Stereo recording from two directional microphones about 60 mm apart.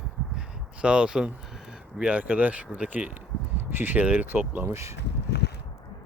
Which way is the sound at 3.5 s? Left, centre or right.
Right.